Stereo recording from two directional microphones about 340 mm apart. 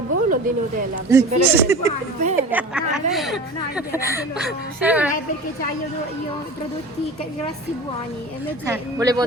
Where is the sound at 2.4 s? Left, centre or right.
Centre.